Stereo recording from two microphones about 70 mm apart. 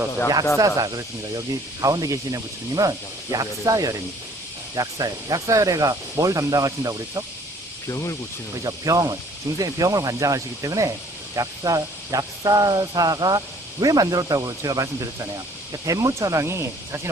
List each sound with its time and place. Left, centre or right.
0.6 s speech: right
4.7 s speech: right
7.9 s speech: left
8.6 s speech: right